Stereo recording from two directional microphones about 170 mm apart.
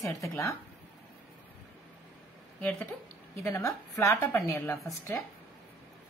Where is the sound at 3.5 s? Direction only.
15° left (ahead or behind).